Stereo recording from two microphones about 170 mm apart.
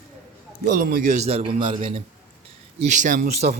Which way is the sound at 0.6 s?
55° right (ahead or behind).